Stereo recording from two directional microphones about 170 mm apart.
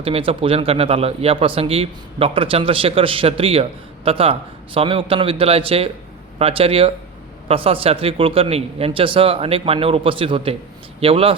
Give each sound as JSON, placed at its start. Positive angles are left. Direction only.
{"t": 0.0, "sound": "speech", "side_deg": -30}